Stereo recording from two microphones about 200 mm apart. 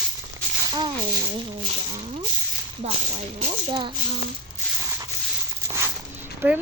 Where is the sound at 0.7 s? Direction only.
20° right (ahead or behind).